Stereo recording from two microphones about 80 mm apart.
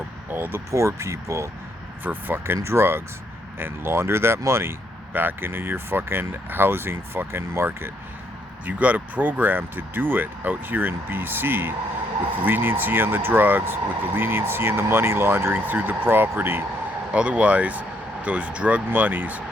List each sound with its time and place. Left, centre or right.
0.3 s speech: right
2.0 s speech: right
8.6 s speech: centre
17.1 s speech: centre